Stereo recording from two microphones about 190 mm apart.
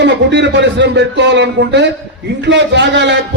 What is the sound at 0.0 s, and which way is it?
A man's voice, 65° right (ahead or behind).